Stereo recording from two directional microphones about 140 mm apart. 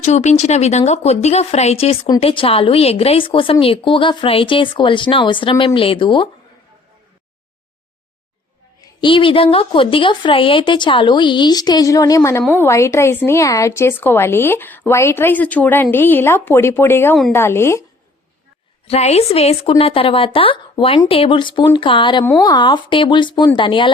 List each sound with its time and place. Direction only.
0.0 s speech: 55° left (ahead or behind); by 6.2 s 35° left (ahead or behind)
9.0 s a woman's voice: 35° left (ahead or behind); by 17.8 s 20° left (ahead or behind)
18.9 s speech: 50° left (ahead or behind)